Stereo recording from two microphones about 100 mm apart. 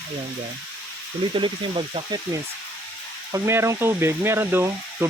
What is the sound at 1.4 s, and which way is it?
Speech, 65° right (ahead or behind).